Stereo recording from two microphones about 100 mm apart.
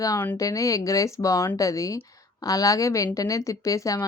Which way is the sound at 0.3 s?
35° left (ahead or behind).